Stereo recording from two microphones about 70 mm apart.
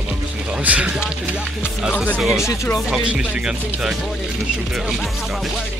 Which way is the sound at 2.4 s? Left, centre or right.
Left.